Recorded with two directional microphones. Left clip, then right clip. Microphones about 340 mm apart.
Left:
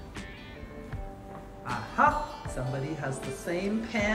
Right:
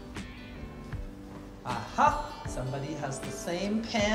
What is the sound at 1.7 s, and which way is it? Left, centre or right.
A woman's voice, centre.